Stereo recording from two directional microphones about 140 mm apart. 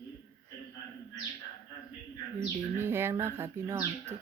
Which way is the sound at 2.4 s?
15° right (ahead or behind).